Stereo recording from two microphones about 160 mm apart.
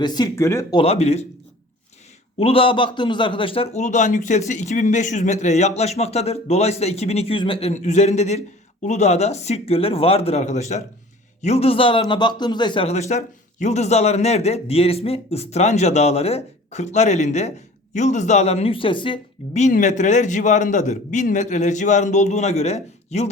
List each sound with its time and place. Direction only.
0.0 s speech: 25° left (ahead or behind)
0.8 s a man's voice: 40° left (ahead or behind)
2.4 s a man's voice: 35° left (ahead or behind)
12.9 s a man's voice: 45° left (ahead or behind)
19.5 s a man's voice: 50° left (ahead or behind)